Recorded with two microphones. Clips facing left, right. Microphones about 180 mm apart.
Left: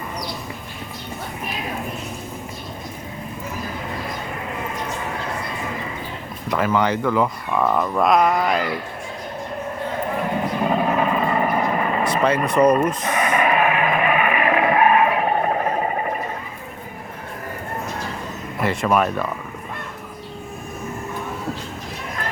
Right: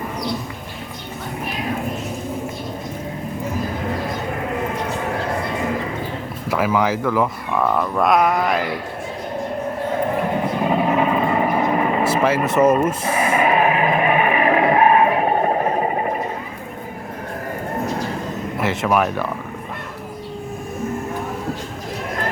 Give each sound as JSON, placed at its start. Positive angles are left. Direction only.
{"t": 6.5, "sound": "speech", "side_deg": -5}
{"t": 10.7, "sound": "vehicle", "side_deg": -15}
{"t": 12.0, "sound": "speech", "side_deg": -5}
{"t": 13.1, "sound": "vehicle", "side_deg": -30}
{"t": 18.6, "sound": "speech", "side_deg": 0}